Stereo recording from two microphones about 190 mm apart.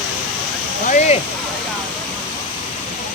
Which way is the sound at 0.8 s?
40° left (ahead or behind).